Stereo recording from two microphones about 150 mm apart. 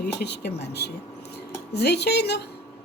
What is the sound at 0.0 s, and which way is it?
A woman's voice, 90° left.